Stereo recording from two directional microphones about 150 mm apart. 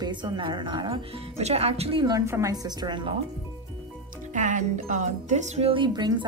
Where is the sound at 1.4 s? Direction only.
45° right (ahead or behind).